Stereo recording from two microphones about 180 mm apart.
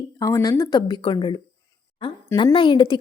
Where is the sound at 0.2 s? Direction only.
15° left (ahead or behind).